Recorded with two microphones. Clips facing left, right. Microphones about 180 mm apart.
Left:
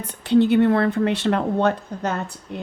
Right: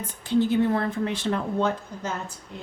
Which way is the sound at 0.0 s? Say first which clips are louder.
Left 6 dB; 65° left (ahead or behind).